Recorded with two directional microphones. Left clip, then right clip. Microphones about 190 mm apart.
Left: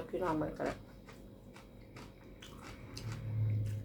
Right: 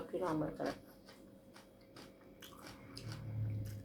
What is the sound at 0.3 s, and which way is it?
Speech, 20° left (ahead or behind).